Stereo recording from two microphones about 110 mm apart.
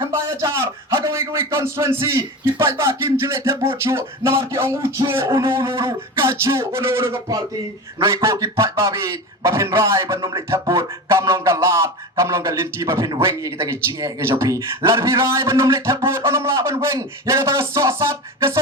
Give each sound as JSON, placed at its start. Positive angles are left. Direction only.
{"t": 0.0, "sound": "a man's voice", "side_deg": -30}